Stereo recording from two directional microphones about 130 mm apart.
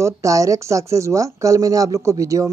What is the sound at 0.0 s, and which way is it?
A man's voice, 25° right (ahead or behind).